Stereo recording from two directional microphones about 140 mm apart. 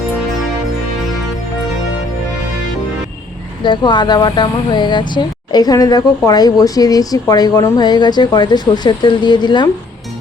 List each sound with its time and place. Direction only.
3.6 s speech: 35° left (ahead or behind)